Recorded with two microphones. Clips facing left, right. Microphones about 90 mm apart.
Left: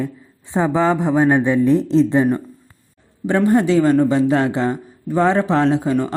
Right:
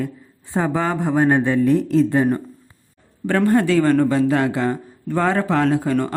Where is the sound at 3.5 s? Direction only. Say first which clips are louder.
Left 2 dB; 20° left (ahead or behind).